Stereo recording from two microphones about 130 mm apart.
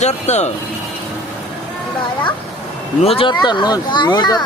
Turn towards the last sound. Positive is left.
turn(degrees=30)  # may be behind; listen again after turning